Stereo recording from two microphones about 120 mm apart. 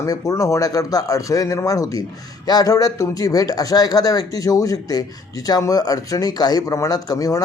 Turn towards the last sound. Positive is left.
turn(degrees=30)  # may be behind; listen again after turning